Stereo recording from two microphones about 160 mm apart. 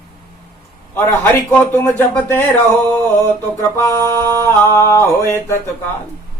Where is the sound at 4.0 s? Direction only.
20° right (ahead or behind).